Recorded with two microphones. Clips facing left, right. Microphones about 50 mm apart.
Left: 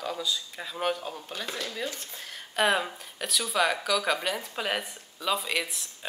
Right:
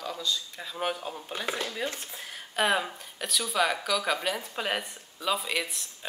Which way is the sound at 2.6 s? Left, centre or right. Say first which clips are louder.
Left 1 dB; centre.